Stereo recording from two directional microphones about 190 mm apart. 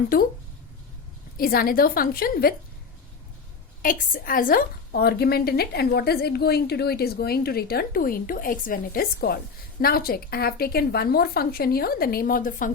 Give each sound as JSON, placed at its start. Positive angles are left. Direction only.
{"t": 0.1, "sound": "a woman's voice", "side_deg": 50}
{"t": 1.4, "sound": "a woman's voice", "side_deg": 50}
{"t": 3.8, "sound": "a woman's voice", "side_deg": 45}